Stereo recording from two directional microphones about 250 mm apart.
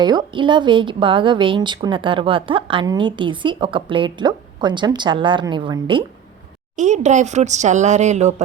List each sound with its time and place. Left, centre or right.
0.0 s a woman's voice: centre